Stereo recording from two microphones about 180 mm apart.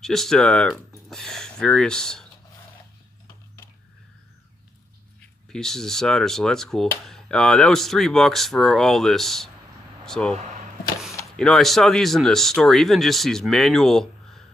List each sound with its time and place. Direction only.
0.0 s speech: centre (ahead or behind)
5.2 s speech: 5° left (ahead or behind)
10.3 s speech: 40° right (ahead or behind)
11.3 s speech: centre (ahead or behind)